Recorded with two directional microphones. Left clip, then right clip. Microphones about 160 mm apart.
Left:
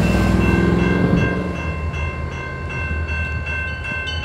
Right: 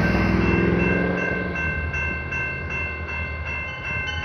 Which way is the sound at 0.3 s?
70° left (ahead or behind).